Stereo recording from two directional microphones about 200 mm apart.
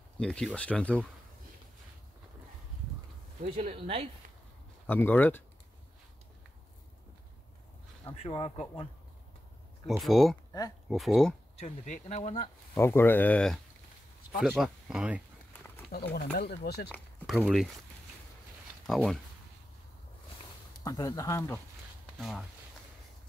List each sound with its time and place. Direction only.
0.2 s speech: 5° left (ahead or behind)
3.4 s speech: 30° right (ahead or behind)
4.8 s speech: 10° left (ahead or behind)
8.0 s speech: 25° left (ahead or behind)
9.8 s speech: centre (ahead or behind)
11.5 s speech: 35° left (ahead or behind)
12.7 s speech: 10° left (ahead or behind); by 15.2 s 5° right (ahead or behind)
15.9 s speech: 55° left (ahead or behind)
16.9 s speech: centre (ahead or behind)
18.9 s speech: centre (ahead or behind)
20.8 s speech: 15° left (ahead or behind)